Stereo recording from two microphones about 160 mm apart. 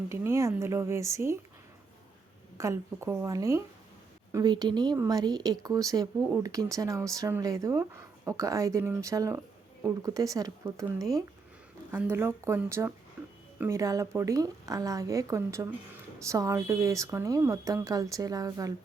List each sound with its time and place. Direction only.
0.1 s speech: 20° right (ahead or behind)
2.6 s speech: 15° right (ahead or behind)
13.2 s a sound: 10° right (ahead or behind)
13.6 s speech: 20° right (ahead or behind)